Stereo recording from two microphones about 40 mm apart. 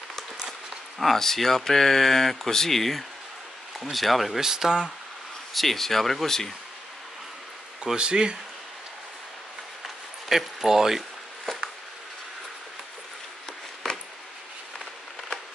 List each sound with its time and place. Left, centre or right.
0.5 s speech: centre
4.4 s speech: centre
5.5 s speech: centre
7.8 s speech: right
10.2 s speech: centre
13.9 s a sound: centre